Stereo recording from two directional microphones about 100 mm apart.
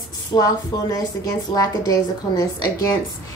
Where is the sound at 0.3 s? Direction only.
40° left (ahead or behind).